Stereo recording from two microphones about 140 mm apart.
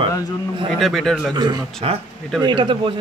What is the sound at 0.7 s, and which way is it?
Speech, centre (ahead or behind).